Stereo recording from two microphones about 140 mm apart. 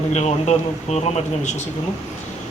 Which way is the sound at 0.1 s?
55° left (ahead or behind).